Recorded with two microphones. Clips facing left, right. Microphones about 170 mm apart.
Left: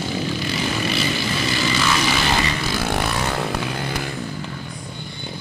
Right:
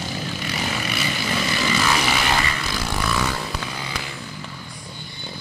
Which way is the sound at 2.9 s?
60° left (ahead or behind).